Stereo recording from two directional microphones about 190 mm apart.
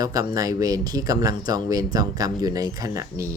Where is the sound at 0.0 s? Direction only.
20° right (ahead or behind).